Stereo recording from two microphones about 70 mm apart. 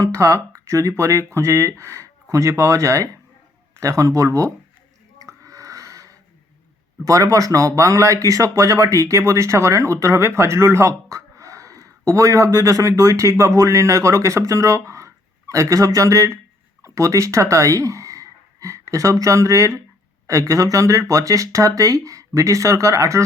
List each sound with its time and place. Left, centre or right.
0.0 s speech: right
5.2 s a sound: right
7.0 s speech: right